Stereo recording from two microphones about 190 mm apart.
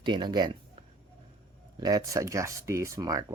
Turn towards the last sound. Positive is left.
turn(degrees=-15)  # may be behind; listen again after turning